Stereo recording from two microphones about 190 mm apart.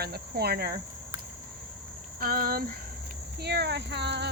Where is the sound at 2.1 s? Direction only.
50° right (ahead or behind).